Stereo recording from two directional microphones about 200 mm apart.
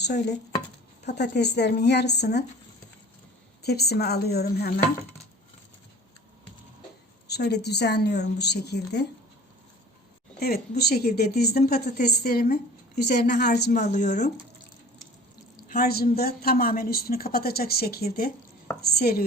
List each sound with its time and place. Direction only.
0.0 s a woman's voice: 55° left (ahead or behind)
3.6 s a woman's voice: 55° left (ahead or behind)
7.3 s a woman's voice: 55° left (ahead or behind)
10.4 s a woman's voice: 55° left (ahead or behind)
13.7 s speech: 35° left (ahead or behind)
15.7 s a woman's voice: 50° left (ahead or behind)